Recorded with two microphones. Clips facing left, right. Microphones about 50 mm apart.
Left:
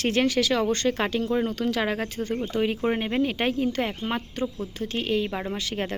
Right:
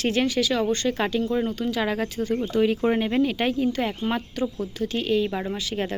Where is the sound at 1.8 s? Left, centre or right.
Left.